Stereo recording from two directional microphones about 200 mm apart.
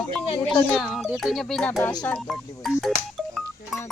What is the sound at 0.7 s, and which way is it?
Speech, centre (ahead or behind).